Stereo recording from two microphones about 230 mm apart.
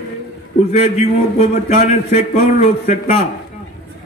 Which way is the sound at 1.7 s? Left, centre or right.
Left.